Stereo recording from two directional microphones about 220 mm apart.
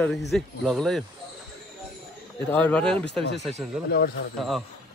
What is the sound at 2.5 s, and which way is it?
Speech, 5° left (ahead or behind).